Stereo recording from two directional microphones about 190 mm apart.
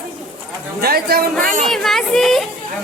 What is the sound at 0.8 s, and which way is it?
Speech, 55° right (ahead or behind).